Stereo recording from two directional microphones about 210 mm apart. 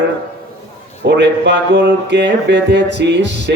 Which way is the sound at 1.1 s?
55° right (ahead or behind).